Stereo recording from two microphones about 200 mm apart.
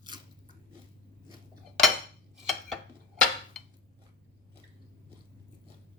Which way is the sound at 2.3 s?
Centre (ahead or behind).